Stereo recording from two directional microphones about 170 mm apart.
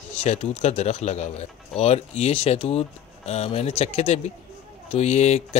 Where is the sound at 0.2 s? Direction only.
40° left (ahead or behind).